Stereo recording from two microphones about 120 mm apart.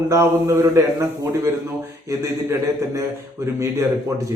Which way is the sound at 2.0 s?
25° right (ahead or behind).